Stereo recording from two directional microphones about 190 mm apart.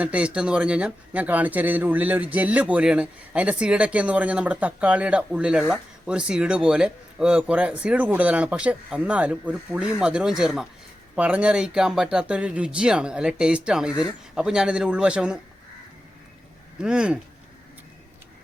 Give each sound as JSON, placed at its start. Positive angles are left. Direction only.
{"t": 0.0, "sound": "speech", "side_deg": -5}
{"t": 16.8, "sound": "speech", "side_deg": -5}